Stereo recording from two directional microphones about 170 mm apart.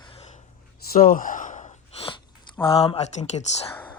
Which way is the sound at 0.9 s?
55° left (ahead or behind).